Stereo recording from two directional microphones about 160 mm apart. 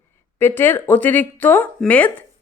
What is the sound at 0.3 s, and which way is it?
A woman's voice, 15° left (ahead or behind).